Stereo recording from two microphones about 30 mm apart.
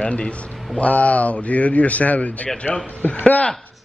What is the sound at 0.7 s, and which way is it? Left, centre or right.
Speech, left.